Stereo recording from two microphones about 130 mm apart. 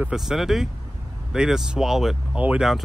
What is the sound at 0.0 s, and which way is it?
Speech, 5° right (ahead or behind).